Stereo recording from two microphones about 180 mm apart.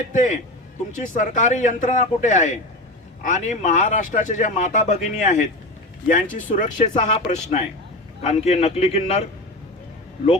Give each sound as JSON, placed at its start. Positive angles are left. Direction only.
{"t": 0.1, "sound": "speech", "side_deg": 45}